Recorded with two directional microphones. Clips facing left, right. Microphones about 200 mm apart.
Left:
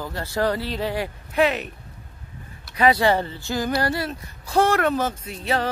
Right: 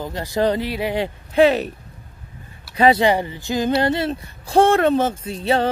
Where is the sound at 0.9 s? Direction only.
25° right (ahead or behind).